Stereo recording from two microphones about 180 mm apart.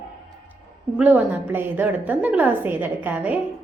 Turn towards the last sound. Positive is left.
turn(degrees=-10)  # may be behind; listen again after turning